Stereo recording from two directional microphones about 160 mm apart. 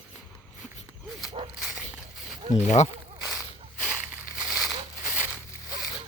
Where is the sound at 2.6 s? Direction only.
45° left (ahead or behind).